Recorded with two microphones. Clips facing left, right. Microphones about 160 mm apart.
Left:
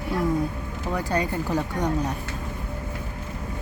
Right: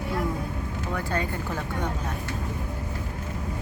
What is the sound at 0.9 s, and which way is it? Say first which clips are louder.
Speech: left 5 dB; 15° left (ahead or behind).